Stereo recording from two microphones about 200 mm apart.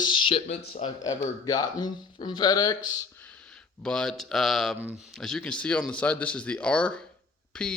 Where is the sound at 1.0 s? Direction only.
15° left (ahead or behind).